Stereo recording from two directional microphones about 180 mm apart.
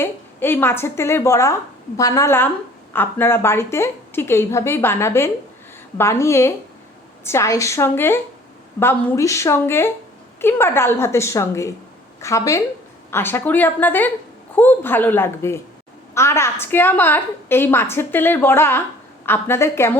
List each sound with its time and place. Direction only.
0.0 s a woman's voice: 10° left (ahead or behind)